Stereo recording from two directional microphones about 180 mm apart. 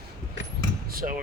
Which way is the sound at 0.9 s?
50° right (ahead or behind).